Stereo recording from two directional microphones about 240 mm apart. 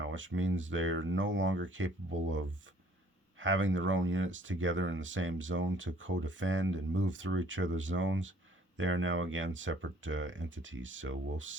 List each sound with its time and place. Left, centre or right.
0.0 s speech: right